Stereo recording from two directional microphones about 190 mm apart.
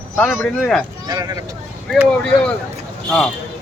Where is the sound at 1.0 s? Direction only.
20° right (ahead or behind).